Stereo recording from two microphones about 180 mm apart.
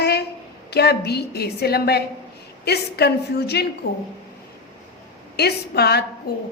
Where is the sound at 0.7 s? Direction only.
65° left (ahead or behind).